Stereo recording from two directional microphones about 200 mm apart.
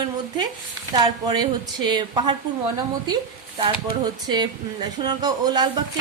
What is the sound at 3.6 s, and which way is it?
Speech, 20° right (ahead or behind).